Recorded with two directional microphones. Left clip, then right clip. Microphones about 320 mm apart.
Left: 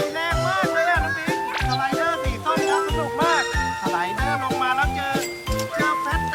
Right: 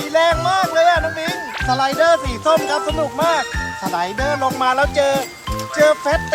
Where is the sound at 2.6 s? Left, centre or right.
Centre.